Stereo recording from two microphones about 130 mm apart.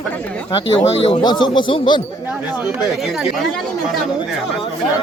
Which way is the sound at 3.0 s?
5° right (ahead or behind).